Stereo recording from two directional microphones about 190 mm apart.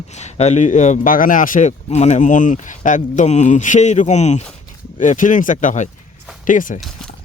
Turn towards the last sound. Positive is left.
turn(degrees=45)  # may be behind; listen again after turning